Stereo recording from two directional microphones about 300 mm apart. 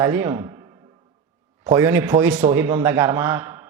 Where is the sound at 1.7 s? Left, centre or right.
Centre.